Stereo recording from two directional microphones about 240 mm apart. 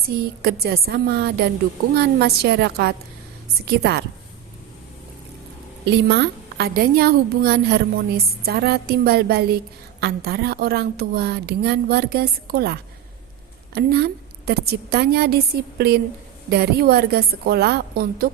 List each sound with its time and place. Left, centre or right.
0.2 s a woman's voice: right
5.8 s a woman's voice: right